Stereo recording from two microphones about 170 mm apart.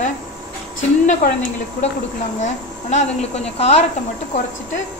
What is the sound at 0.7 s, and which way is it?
Speech, 50° left (ahead or behind).